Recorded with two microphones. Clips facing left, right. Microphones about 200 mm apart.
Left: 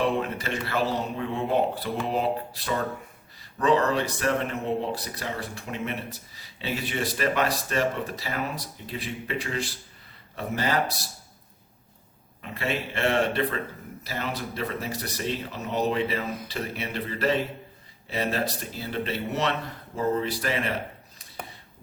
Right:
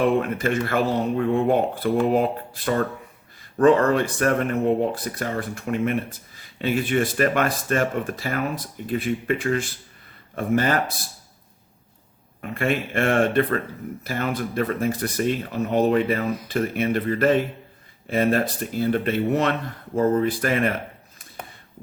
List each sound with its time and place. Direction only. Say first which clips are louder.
0.2 s speech: right 7 dB; 50° right (ahead or behind)
12.4 s speech: right 6 dB; 50° right (ahead or behind)